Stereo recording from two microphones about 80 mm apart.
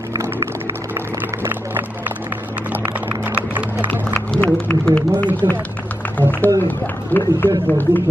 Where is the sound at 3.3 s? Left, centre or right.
Right.